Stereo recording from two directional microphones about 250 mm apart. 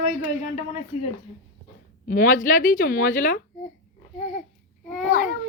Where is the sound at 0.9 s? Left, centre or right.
Left.